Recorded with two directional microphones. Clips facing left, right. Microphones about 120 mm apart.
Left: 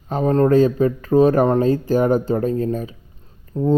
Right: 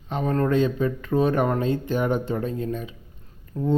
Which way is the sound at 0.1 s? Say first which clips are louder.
Left 7 dB; 35° left (ahead or behind).